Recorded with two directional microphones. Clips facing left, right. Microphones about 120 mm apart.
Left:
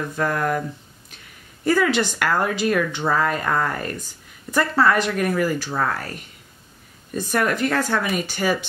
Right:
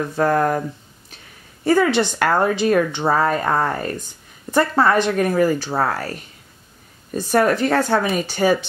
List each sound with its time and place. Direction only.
0.1 s speech: 35° right (ahead or behind)
1.7 s speech: 25° right (ahead or behind)
7.2 s speech: 30° right (ahead or behind)